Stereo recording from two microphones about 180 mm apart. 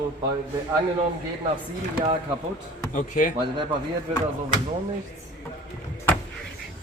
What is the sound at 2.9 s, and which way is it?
Speech, 45° left (ahead or behind).